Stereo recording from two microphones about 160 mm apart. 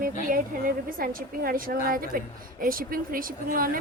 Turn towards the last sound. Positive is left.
turn(degrees=-65)  # may be behind; listen again after turning